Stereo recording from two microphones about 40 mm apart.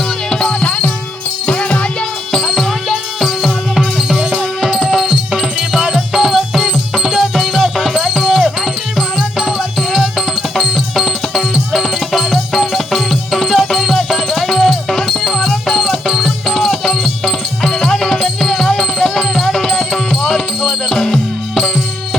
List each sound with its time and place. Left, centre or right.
0.3 s music: left
0.6 s music: left
2.3 s music: centre
2.9 s music: centre
5.0 s music: centre